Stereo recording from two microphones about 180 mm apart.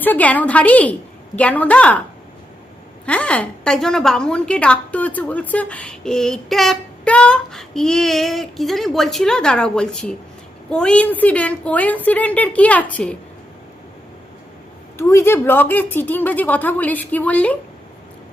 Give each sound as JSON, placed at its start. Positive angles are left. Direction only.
{"t": 0.0, "sound": "speech", "side_deg": 10}
{"t": 3.1, "sound": "a woman's voice", "side_deg": 5}
{"t": 14.9, "sound": "speech", "side_deg": 15}